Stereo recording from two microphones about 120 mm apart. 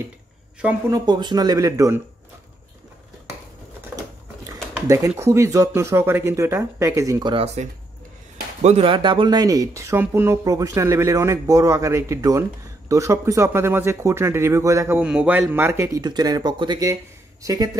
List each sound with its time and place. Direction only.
0.8 s speech: 30° right (ahead or behind)
3.9 s sewing machine: 15° right (ahead or behind)
4.5 s speech: 25° right (ahead or behind)
8.6 s speech: 50° right (ahead or behind); by 15.0 s 25° right (ahead or behind)
15.0 s a man's voice: 10° right (ahead or behind)
16.0 s speech: 35° right (ahead or behind)